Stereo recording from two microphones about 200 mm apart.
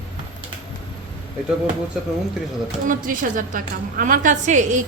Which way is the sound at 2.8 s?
40° right (ahead or behind).